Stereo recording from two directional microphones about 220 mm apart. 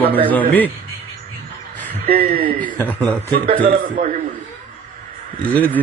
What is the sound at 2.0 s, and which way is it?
Speech, 40° right (ahead or behind).